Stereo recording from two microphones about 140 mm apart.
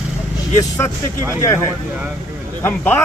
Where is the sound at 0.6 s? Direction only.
20° left (ahead or behind).